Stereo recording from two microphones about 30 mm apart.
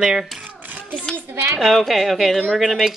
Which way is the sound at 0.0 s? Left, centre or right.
Centre.